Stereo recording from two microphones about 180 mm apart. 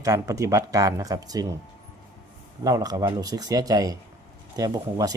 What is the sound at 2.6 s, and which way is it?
Speech, 20° right (ahead or behind).